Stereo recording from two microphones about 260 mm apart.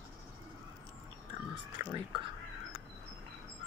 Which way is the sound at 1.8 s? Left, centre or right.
Centre.